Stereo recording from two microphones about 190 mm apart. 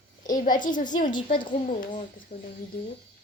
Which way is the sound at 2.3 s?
30° left (ahead or behind).